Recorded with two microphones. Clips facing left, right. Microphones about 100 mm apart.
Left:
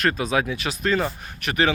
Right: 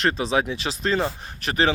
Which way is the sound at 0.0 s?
25° right (ahead or behind).